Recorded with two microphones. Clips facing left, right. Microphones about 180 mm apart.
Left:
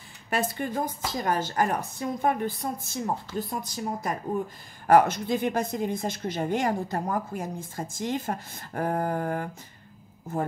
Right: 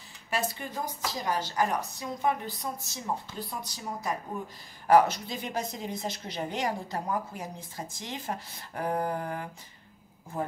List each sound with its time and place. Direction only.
0.3 s speech: 50° left (ahead or behind)